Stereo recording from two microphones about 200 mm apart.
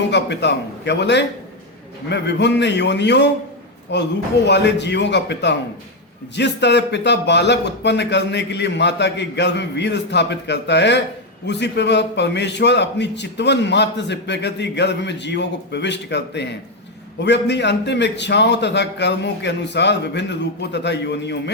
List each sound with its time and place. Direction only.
0.1 s a man's voice: 60° left (ahead or behind)